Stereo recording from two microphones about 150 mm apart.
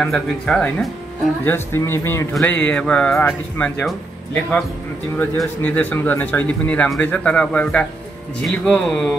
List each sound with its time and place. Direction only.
0.0 s speech: 5° left (ahead or behind)
1.4 s speech: 15° left (ahead or behind)